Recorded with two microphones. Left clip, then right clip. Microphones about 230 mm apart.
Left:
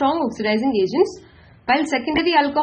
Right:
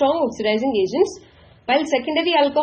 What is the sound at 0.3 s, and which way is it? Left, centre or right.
A woman's voice, left.